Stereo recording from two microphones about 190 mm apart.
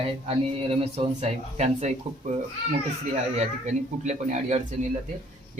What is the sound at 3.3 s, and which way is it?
Speech, 35° right (ahead or behind).